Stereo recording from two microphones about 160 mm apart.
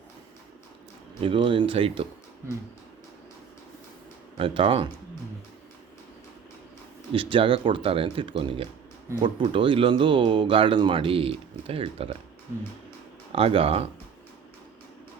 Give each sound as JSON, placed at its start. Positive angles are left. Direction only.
{"t": 1.2, "sound": "speech", "side_deg": -35}
{"t": 4.4, "sound": "speech", "side_deg": -35}
{"t": 7.1, "sound": "speech", "side_deg": -35}
{"t": 13.3, "sound": "speech", "side_deg": -35}